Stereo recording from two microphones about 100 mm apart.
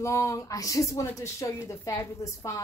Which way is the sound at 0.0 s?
30° left (ahead or behind).